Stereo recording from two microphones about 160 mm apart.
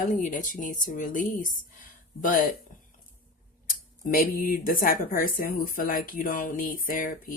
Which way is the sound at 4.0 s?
60° left (ahead or behind).